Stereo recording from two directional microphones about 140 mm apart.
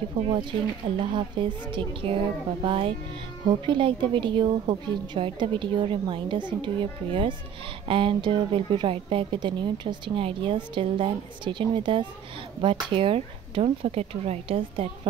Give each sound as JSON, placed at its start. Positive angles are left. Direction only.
{"t": 0.3, "sound": "a woman's voice", "side_deg": -35}